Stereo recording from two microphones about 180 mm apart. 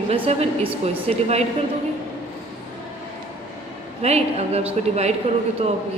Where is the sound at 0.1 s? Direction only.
35° right (ahead or behind).